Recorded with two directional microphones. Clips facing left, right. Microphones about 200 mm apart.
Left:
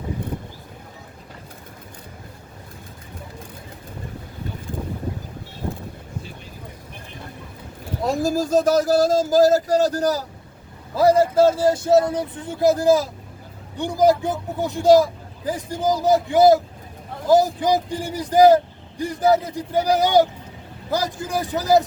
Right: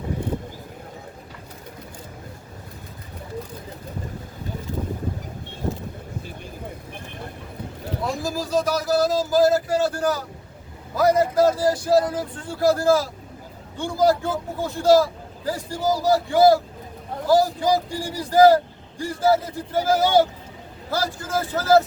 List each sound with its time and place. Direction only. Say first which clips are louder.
8.0 s speech: left 7 dB; 45° left (ahead or behind); by 21.8 s 15° left (ahead or behind)